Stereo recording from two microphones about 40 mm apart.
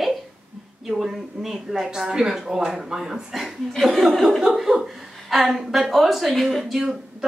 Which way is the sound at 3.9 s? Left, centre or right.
Centre.